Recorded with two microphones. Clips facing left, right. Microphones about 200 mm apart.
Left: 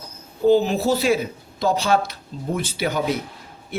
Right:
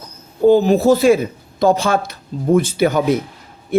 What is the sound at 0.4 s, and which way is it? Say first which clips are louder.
Speech: right 6 dB; 50° right (ahead or behind).